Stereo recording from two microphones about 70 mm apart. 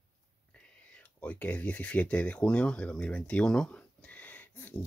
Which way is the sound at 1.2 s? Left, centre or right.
Left.